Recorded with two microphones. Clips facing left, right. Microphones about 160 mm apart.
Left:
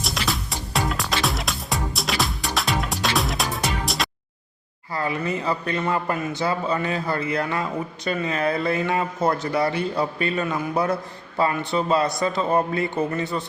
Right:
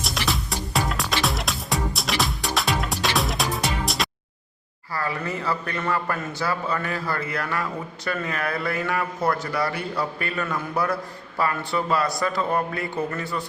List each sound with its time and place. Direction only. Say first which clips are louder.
0.0 s music: even; centre (ahead or behind)
4.9 s a man's voice: left 3 dB; 20° left (ahead or behind)